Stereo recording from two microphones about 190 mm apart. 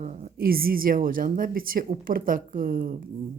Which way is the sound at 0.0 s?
40° right (ahead or behind).